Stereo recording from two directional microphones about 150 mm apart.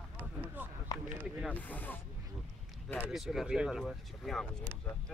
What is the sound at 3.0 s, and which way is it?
Speech, centre (ahead or behind).